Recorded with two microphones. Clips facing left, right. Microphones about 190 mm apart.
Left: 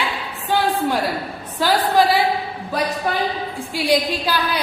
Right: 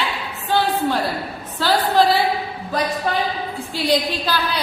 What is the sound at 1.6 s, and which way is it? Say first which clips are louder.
Speech: left 1 dB; 15° left (ahead or behind).